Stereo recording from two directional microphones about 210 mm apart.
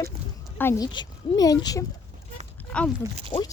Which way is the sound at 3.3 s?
25° left (ahead or behind).